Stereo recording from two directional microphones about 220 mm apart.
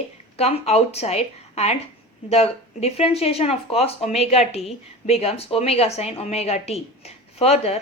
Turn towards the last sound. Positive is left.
turn(degrees=30)  # may be behind; listen again after turning